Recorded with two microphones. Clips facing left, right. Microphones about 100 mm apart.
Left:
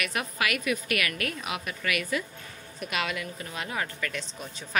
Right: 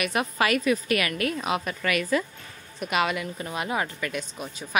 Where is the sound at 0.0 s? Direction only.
25° right (ahead or behind).